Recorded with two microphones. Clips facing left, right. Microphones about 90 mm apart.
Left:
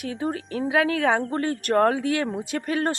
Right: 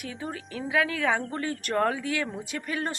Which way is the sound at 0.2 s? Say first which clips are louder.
Left 9 dB; 45° left (ahead or behind).